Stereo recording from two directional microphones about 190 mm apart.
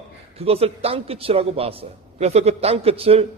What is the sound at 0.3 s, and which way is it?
A man's voice, 30° right (ahead or behind).